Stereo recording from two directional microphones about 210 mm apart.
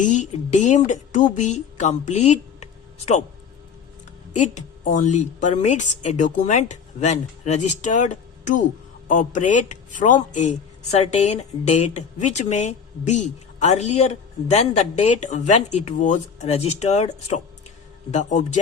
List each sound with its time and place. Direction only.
0.0 s speech: 35° left (ahead or behind)
4.4 s speech: 35° left (ahead or behind)